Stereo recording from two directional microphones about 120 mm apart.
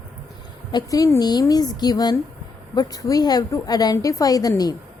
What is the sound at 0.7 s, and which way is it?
A woman's voice, 30° left (ahead or behind).